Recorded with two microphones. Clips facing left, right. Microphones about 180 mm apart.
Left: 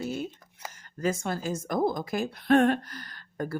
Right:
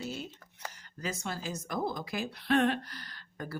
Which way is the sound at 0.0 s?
50° left (ahead or behind).